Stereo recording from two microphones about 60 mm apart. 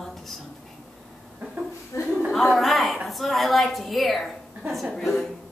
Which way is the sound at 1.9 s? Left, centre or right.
Left.